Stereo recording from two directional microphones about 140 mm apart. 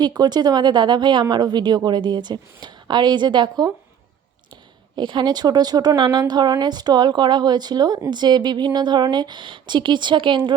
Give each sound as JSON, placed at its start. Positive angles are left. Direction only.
{"t": 0.0, "sound": "speech", "side_deg": -30}
{"t": 4.9, "sound": "speech", "side_deg": -30}